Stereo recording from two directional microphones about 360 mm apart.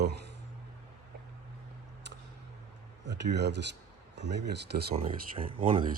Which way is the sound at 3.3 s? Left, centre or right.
Right.